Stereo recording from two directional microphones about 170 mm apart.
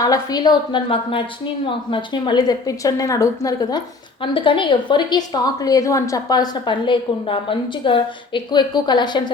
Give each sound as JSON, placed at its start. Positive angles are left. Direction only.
{"t": 0.0, "sound": "a woman's voice", "side_deg": 20}